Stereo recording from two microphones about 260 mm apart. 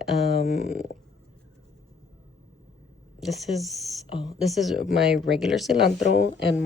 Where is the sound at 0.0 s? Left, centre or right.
Centre.